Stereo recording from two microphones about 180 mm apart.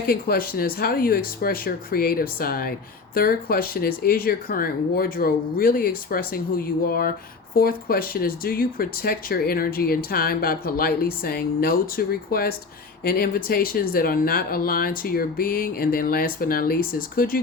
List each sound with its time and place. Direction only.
0.1 s speech: 55° left (ahead or behind)